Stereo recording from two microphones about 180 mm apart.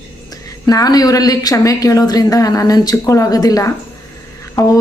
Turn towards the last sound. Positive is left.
turn(degrees=20)  # may be behind; listen again after turning